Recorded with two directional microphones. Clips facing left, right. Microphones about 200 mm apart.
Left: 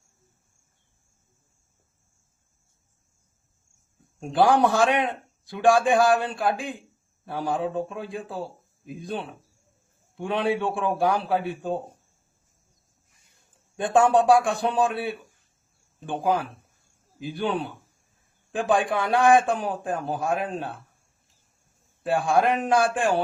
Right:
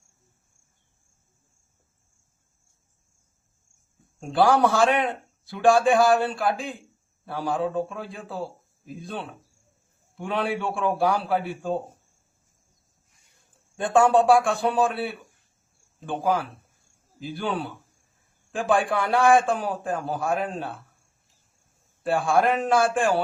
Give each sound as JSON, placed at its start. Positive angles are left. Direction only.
{"t": 4.2, "sound": "a man's voice", "side_deg": 15}
{"t": 13.7, "sound": "a man's voice", "side_deg": 20}
{"t": 18.5, "sound": "a man's voice", "side_deg": 20}
{"t": 22.0, "sound": "a man's voice", "side_deg": 15}